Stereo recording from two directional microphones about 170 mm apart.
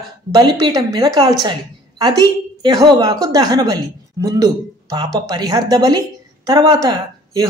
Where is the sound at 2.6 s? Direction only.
25° right (ahead or behind).